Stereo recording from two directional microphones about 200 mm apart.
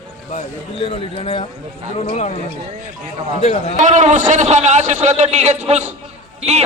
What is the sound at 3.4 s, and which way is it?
Speech, 30° left (ahead or behind).